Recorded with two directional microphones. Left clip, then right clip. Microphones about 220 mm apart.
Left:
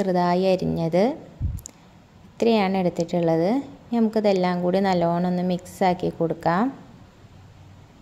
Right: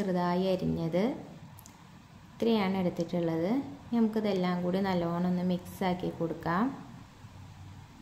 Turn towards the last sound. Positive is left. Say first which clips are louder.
# left 9 dB
turn(degrees=35)  # may be behind; listen again after turning